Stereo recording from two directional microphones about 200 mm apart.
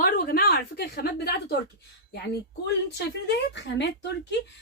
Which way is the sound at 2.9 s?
60° left (ahead or behind).